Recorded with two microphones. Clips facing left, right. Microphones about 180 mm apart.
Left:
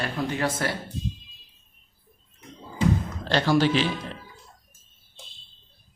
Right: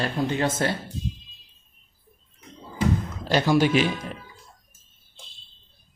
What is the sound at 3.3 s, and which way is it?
Speech, 10° right (ahead or behind).